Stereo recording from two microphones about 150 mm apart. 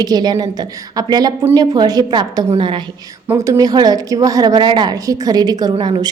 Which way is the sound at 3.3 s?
20° right (ahead or behind).